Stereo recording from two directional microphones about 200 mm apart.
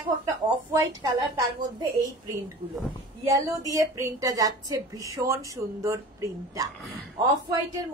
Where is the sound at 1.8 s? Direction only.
20° right (ahead or behind).